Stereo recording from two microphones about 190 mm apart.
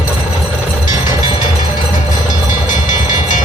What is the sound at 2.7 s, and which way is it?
Vehicle, 45° left (ahead or behind).